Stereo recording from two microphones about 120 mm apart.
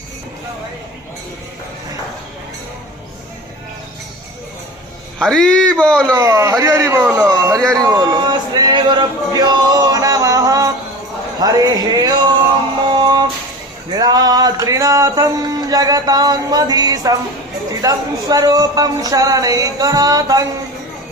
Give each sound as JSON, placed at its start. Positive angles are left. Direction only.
{"t": 5.2, "sound": "speech", "side_deg": 5}
{"t": 6.1, "sound": "a man's voice", "side_deg": -25}
{"t": 7.4, "sound": "speech", "side_deg": -30}
{"t": 11.3, "sound": "a sound", "side_deg": -30}
{"t": 12.9, "sound": "music", "side_deg": -35}
{"t": 13.9, "sound": "a sound", "side_deg": -35}